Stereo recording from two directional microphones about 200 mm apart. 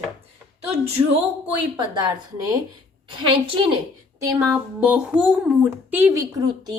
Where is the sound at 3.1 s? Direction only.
25° right (ahead or behind).